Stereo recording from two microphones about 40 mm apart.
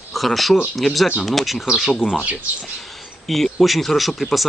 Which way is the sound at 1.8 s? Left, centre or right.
Centre.